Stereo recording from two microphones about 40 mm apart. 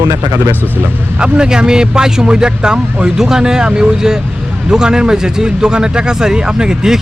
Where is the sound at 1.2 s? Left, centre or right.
Centre.